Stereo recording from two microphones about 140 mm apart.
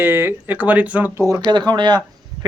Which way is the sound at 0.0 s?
15° right (ahead or behind).